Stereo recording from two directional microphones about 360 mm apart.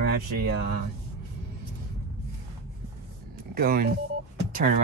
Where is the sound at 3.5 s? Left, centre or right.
Right.